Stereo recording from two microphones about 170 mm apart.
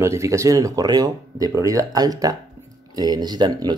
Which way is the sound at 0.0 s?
15° right (ahead or behind).